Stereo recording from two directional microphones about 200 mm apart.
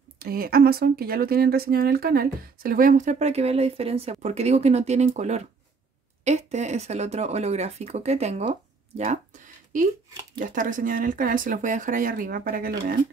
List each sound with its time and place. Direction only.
0.2 s speech: 50° right (ahead or behind)
10.4 s speech: 40° right (ahead or behind)